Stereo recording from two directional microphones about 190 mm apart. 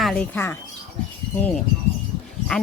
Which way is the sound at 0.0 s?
5° left (ahead or behind).